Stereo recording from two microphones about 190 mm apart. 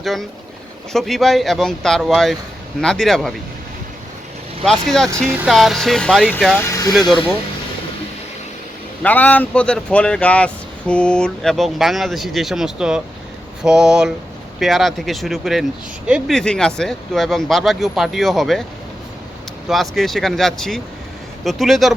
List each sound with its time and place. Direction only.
0.0 s speech: centre (ahead or behind)
4.6 s speech: centre (ahead or behind)
6.6 s speech: 15° left (ahead or behind)
9.0 s speech: 10° left (ahead or behind)
19.6 s speech: centre (ahead or behind)